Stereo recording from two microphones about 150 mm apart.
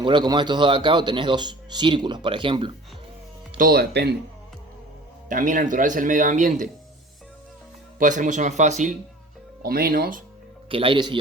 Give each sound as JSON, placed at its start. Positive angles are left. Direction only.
{"t": 0.0, "sound": "speech", "side_deg": -30}
{"t": 3.6, "sound": "speech", "side_deg": -90}
{"t": 5.3, "sound": "speech", "side_deg": -60}
{"t": 7.9, "sound": "speech", "side_deg": -60}
{"t": 9.6, "sound": "speech", "side_deg": -85}
{"t": 10.7, "sound": "speech", "side_deg": -35}